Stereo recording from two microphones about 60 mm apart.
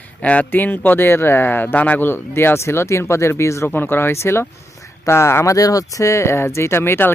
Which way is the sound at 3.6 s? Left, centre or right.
Left.